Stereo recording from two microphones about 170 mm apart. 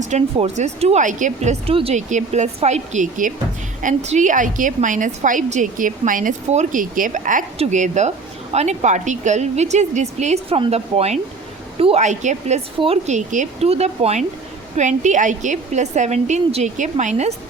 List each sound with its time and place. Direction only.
0.0 s a woman's voice: 40° right (ahead or behind)